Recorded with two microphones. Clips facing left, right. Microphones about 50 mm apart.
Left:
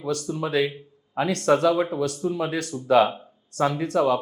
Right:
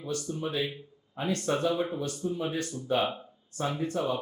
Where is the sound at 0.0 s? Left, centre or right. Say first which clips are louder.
Left 6 dB; left.